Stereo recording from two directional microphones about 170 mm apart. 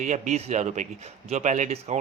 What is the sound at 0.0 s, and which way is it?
Speech, 45° right (ahead or behind).